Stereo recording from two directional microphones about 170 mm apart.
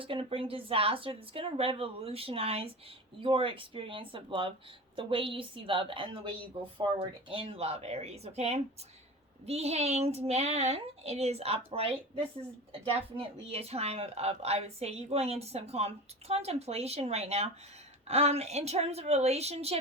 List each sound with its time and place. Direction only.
0.0 s a woman's voice: 30° right (ahead or behind)